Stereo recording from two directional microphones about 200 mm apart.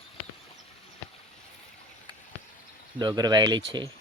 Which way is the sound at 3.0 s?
20° right (ahead or behind).